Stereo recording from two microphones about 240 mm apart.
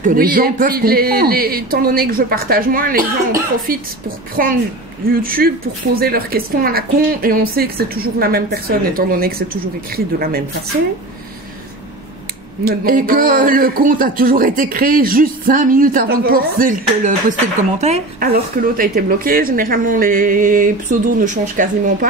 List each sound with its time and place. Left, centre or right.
0.0 s speech: right
5.1 s speech: right
12.6 s speech: right